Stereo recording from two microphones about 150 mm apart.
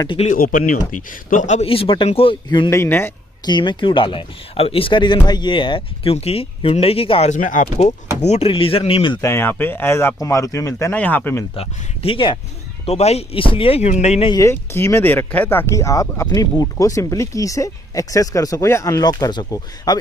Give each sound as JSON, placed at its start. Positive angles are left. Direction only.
{"t": 0.4, "sound": "speech", "side_deg": 65}
{"t": 1.3, "sound": "speech", "side_deg": 55}
{"t": 1.7, "sound": "speech", "side_deg": 35}
{"t": 2.7, "sound": "speech", "side_deg": 15}
{"t": 3.4, "sound": "speech", "side_deg": 30}
{"t": 8.3, "sound": "speech", "side_deg": 40}
{"t": 9.2, "sound": "speech", "side_deg": 15}
{"t": 11.5, "sound": "speech", "side_deg": 40}
{"t": 14.3, "sound": "speech", "side_deg": 20}